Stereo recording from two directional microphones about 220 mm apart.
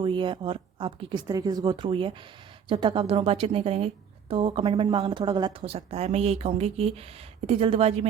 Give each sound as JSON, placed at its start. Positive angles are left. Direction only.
{"t": 0.0, "sound": "speech", "side_deg": -20}